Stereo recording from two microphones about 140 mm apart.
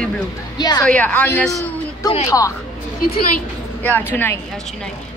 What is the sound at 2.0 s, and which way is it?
Speech, 25° left (ahead or behind).